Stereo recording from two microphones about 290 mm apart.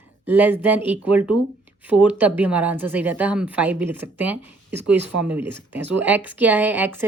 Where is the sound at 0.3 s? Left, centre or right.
Centre.